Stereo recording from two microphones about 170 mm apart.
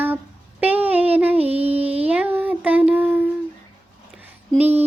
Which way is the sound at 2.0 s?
10° right (ahead or behind).